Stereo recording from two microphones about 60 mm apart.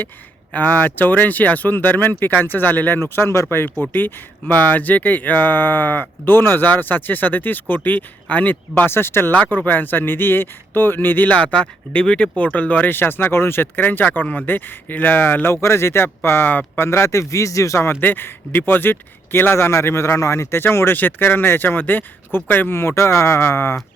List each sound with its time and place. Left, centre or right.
0.5 s speech: left
3.0 s speech: left
8.9 s speech: left
9.3 s speech: left
12.9 s speech: left
15.6 s a man's voice: left
18.0 s speech: left